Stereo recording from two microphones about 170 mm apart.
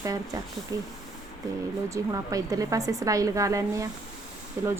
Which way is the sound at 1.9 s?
20° right (ahead or behind).